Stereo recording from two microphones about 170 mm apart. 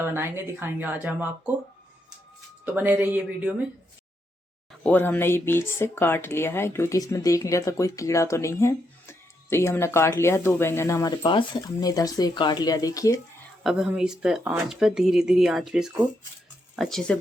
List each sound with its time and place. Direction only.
0.0 s speech: 15° right (ahead or behind)
2.7 s speech: 10° right (ahead or behind)
4.8 s speech: 10° left (ahead or behind)
13.7 s speech: 5° right (ahead or behind)